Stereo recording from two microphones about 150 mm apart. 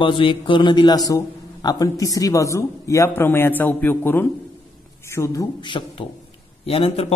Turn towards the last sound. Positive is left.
turn(degrees=40)  # may be behind; listen again after turning